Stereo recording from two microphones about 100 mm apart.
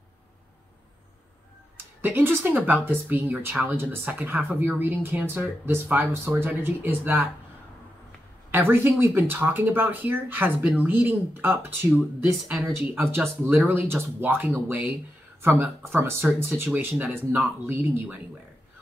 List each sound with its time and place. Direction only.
1.8 s speech: 20° right (ahead or behind)
8.5 s speech: 20° right (ahead or behind)